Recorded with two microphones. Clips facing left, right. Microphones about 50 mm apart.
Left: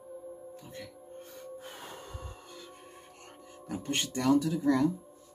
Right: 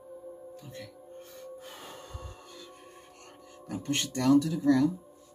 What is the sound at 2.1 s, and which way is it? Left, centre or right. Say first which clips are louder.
Music: even; centre.